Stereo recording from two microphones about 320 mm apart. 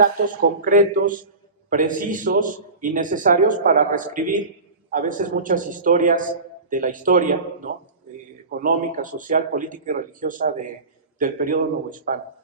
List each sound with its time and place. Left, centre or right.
0.6 s a man's voice: right